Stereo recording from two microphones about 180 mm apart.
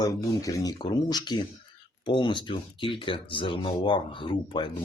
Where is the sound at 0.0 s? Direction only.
20° left (ahead or behind).